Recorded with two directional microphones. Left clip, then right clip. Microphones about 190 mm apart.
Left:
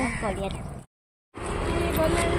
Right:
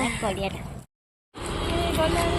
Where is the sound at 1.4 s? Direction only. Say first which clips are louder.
Right 1 dB; 50° right (ahead or behind).